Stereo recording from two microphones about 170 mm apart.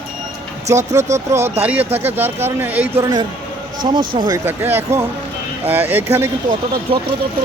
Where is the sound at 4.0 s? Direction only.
55° right (ahead or behind).